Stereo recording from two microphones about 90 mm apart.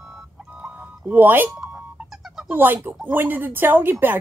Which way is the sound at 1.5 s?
10° right (ahead or behind).